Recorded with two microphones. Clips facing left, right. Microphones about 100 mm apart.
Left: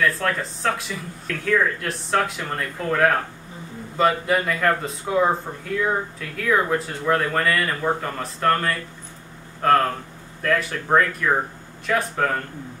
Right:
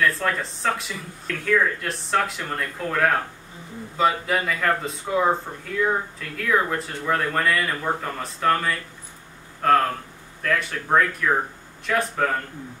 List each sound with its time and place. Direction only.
0.0 s speech: centre (ahead or behind)